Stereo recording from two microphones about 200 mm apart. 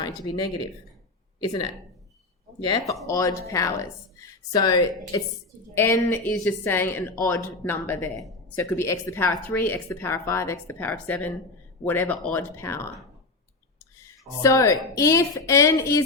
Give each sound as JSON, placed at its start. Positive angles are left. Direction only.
{"t": 1.4, "sound": "a woman's voice", "side_deg": 20}